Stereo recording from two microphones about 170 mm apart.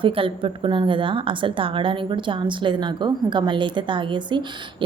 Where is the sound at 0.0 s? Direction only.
30° right (ahead or behind).